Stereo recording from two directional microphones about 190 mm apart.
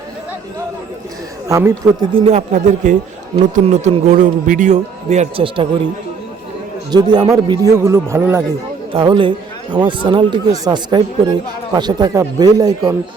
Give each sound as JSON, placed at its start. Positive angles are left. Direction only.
{"t": 1.5, "sound": "speech", "side_deg": -15}
{"t": 2.1, "sound": "speech", "side_deg": -35}
{"t": 6.9, "sound": "speech", "side_deg": -20}
{"t": 8.9, "sound": "speech", "side_deg": -25}